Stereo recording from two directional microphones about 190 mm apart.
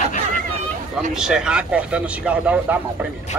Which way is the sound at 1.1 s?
5° right (ahead or behind).